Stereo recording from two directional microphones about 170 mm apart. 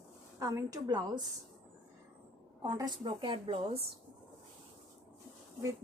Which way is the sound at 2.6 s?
25° right (ahead or behind).